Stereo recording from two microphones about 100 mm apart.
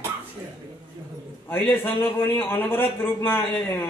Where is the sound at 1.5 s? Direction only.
20° left (ahead or behind).